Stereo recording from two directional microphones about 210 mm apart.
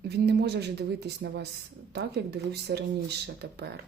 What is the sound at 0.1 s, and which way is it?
Speech, 50° right (ahead or behind).